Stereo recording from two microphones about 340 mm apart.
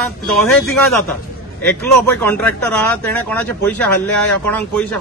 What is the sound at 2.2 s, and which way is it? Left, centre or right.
Speech, centre.